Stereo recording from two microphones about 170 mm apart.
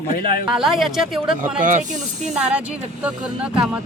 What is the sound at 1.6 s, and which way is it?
Speech, 50° right (ahead or behind).